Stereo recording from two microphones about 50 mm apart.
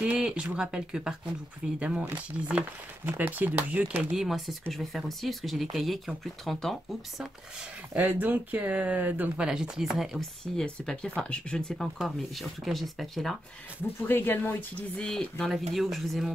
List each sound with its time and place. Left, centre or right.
0.0 s speech: right
3.2 s speech: right
4.1 s speech: centre
4.6 s speech: centre
8.0 s speech: right
9.4 s speech: centre
10.4 s speech: centre
11.6 s speech: centre
14.0 s speech: left
14.8 s speech: centre
15.5 s speech: centre